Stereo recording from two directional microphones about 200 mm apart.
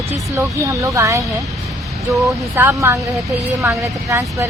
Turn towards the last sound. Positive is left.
turn(degrees=-15)  # may be behind; listen again after turning